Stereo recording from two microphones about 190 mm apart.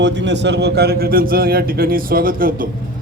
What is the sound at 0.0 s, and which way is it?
A man's voice, 65° right (ahead or behind).